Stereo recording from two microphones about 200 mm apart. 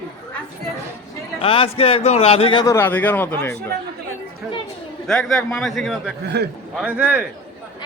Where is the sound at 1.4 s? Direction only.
25° left (ahead or behind); by 3.5 s 10° left (ahead or behind).